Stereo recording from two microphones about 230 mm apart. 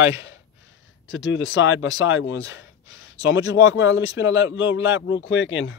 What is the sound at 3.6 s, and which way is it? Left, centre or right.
Speech, left.